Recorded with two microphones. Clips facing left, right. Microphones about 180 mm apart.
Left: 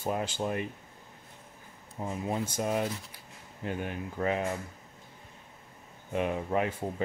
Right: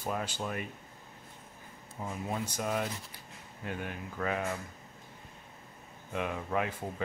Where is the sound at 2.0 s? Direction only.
25° left (ahead or behind).